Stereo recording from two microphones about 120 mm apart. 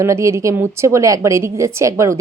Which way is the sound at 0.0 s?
25° right (ahead or behind).